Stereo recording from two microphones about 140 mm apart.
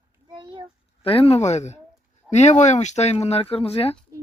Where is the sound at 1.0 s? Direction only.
40° left (ahead or behind).